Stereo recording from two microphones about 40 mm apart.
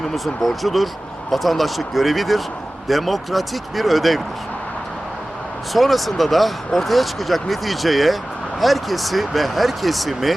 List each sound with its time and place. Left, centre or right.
0.1 s speech: centre
5.7 s speech: centre